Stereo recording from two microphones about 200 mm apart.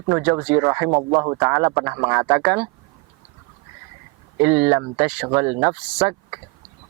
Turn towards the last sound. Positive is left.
turn(degrees=-10)  # may be behind; listen again after turning